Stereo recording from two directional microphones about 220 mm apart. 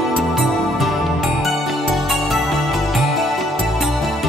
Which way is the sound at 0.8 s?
Centre (ahead or behind).